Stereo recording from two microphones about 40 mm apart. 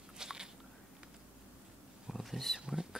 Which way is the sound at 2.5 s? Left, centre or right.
Centre.